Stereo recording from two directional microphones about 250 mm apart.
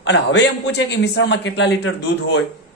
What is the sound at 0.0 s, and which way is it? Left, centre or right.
A man's voice, left.